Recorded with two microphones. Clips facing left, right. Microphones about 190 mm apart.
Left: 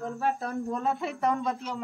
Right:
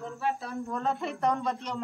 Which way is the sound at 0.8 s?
5° left (ahead or behind).